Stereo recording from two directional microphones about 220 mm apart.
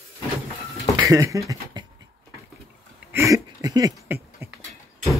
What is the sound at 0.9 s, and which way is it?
Speech, 15° right (ahead or behind).